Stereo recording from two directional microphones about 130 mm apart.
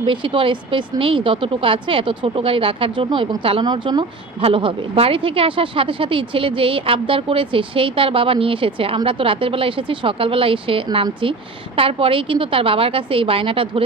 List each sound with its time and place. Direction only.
0.0 s a woman's voice: 40° right (ahead or behind)